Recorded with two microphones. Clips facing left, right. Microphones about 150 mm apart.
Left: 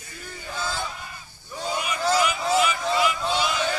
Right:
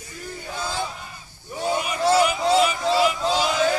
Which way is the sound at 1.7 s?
35° right (ahead or behind).